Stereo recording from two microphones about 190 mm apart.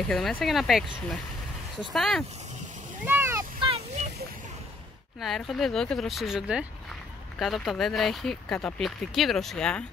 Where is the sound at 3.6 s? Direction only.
35° right (ahead or behind).